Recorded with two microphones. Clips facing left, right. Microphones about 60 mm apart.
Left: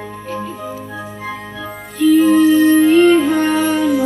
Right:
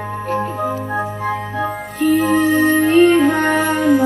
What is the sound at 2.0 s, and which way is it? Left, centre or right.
Music, right.